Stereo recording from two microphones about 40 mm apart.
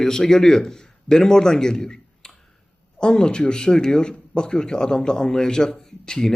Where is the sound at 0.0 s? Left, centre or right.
Centre.